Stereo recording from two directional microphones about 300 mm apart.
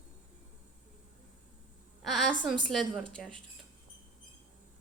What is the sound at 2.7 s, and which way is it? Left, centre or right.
Speech, centre.